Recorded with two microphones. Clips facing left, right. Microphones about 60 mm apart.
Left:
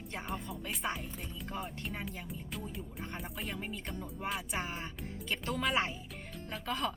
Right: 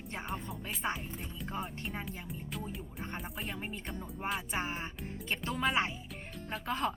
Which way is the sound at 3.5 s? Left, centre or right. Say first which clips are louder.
Even; right.